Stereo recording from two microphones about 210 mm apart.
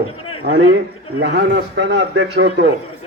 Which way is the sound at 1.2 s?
55° right (ahead or behind).